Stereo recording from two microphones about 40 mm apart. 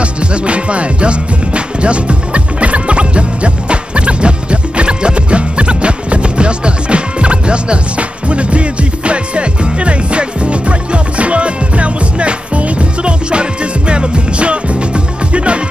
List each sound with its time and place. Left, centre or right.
0.0 s music: right